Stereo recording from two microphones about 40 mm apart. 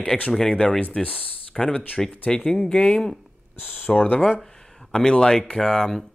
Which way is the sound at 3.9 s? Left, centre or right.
Centre.